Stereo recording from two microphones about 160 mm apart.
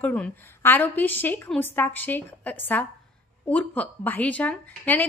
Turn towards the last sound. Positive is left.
turn(degrees=10)  # may be behind; listen again after turning